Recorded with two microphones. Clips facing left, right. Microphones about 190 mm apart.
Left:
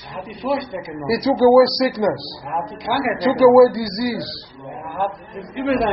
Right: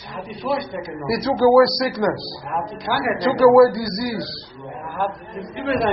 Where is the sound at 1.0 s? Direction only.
10° left (ahead or behind).